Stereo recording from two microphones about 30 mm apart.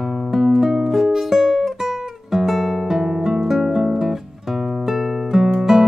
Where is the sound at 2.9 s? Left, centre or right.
Centre.